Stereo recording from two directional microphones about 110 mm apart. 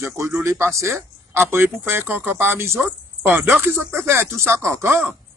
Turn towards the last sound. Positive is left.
turn(degrees=-20)  # may be behind; listen again after turning